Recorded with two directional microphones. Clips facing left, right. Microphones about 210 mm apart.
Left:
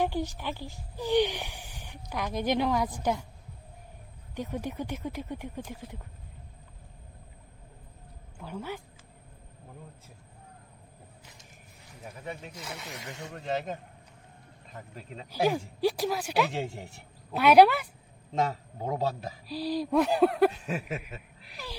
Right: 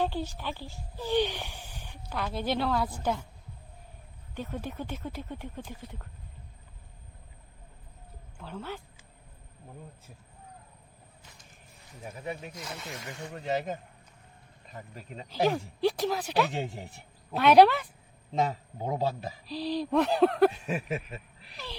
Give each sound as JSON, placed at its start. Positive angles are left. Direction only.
{"t": 0.0, "sound": "speech", "side_deg": 15}
{"t": 4.4, "sound": "speech", "side_deg": 15}
{"t": 8.4, "sound": "speech", "side_deg": 10}
{"t": 12.0, "sound": "speech", "side_deg": -10}
{"t": 12.5, "sound": "speech", "side_deg": 10}
{"t": 13.0, "sound": "speech", "side_deg": 20}
{"t": 13.3, "sound": "a man's voice", "side_deg": -5}
{"t": 15.4, "sound": "a man's voice", "side_deg": 10}
{"t": 19.5, "sound": "speech", "side_deg": 10}